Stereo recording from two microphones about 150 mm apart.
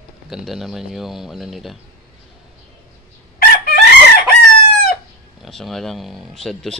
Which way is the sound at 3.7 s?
90° left.